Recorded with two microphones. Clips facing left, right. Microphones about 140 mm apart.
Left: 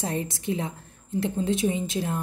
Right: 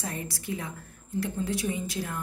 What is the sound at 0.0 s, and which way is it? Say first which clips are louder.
A woman's voice: left 7 dB; 25° left (ahead or behind).